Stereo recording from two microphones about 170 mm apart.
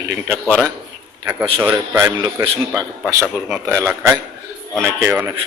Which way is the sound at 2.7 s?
5° left (ahead or behind).